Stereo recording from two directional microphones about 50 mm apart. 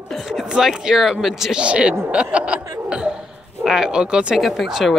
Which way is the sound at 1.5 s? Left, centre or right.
Centre.